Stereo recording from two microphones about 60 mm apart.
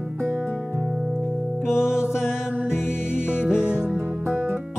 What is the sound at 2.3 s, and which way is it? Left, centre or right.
Music, left.